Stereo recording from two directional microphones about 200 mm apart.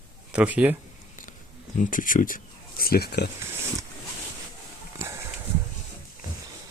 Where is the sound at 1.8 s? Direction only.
40° left (ahead or behind).